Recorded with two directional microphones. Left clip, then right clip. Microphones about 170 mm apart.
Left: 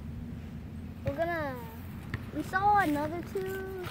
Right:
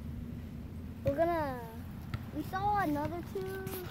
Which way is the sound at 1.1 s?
50° right (ahead or behind).